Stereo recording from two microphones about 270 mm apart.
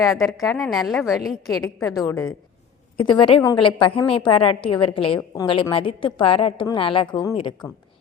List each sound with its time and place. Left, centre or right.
0.3 s a woman's voice: centre
1.9 s a woman's voice: centre